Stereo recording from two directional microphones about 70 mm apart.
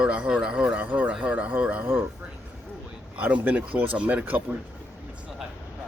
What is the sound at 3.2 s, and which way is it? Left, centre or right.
Speech, right.